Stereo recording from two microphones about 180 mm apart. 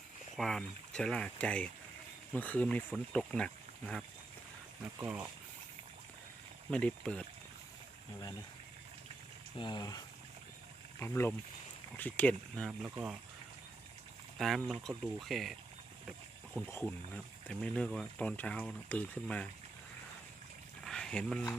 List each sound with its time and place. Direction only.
0.3 s speech: 5° left (ahead or behind)
4.9 s speech: 10° right (ahead or behind)
6.7 s speech: 5° left (ahead or behind)
9.6 s speech: 25° left (ahead or behind)
11.0 s speech: 10° left (ahead or behind); by 13.1 s 5° right (ahead or behind)
14.3 s speech: centre (ahead or behind)
16.6 s speech: 10° left (ahead or behind)
20.8 s a sound: 5° left (ahead or behind)